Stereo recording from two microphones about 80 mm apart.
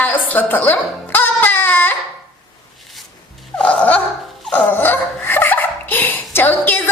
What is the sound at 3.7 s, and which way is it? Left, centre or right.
Dog, centre.